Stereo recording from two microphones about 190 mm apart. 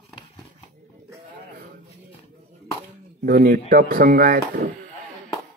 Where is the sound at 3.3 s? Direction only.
50° right (ahead or behind).